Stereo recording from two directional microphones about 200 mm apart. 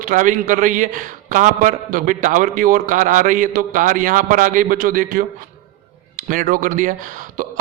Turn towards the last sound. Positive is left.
turn(degrees=-40)  # may be behind; listen again after turning